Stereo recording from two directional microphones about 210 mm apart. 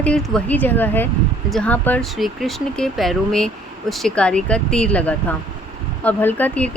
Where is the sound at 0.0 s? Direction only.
5° left (ahead or behind).